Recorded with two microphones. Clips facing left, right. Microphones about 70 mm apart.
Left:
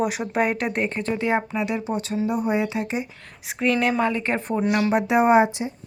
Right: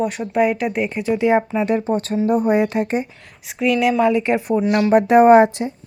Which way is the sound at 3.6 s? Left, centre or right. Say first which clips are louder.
Right 5 dB; centre.